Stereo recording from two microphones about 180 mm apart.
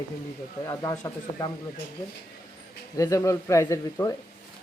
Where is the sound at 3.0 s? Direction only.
15° left (ahead or behind).